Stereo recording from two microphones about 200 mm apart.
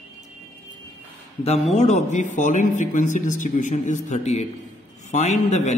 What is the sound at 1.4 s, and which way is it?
Speech, 30° left (ahead or behind).